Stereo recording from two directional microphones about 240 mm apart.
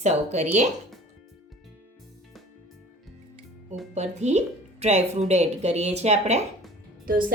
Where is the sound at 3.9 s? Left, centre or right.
Right.